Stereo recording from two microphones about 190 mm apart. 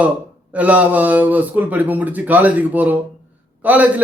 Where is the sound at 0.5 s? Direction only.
5° right (ahead or behind).